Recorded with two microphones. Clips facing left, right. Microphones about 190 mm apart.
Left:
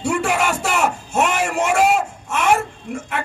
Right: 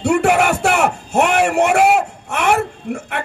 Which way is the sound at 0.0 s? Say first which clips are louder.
Right 5 dB; 65° right (ahead or behind).